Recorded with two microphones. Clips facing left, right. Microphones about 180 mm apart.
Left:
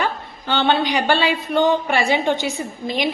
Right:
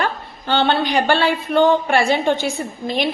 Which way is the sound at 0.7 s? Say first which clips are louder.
Left 2 dB; 15° left (ahead or behind).